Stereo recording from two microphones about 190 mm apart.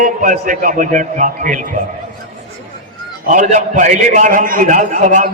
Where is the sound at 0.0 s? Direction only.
45° right (ahead or behind).